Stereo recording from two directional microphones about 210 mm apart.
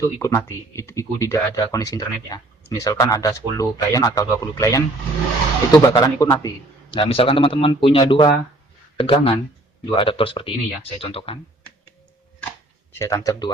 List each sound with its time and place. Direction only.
0.0 s a man's voice: 15° left (ahead or behind)
13.0 s speech: 15° left (ahead or behind)